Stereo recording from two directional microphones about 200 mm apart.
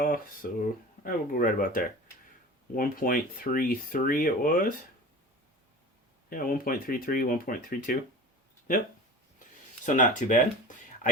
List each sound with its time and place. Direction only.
0.6 s speech: 45° left (ahead or behind)
6.3 s speech: 45° left (ahead or behind)
9.8 s speech: 40° left (ahead or behind)